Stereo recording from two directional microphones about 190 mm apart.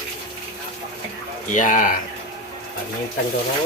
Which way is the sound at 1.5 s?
40° left (ahead or behind).